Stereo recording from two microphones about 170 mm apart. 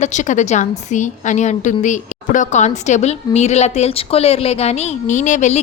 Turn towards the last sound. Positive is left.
turn(degrees=45)  # may be behind; listen again after turning